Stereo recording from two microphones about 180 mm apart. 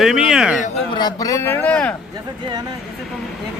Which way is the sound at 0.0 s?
5° right (ahead or behind).